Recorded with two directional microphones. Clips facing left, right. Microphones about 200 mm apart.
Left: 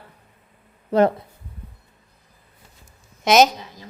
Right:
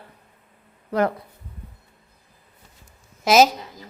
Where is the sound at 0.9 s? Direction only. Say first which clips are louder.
Left 5 dB; 25° left (ahead or behind).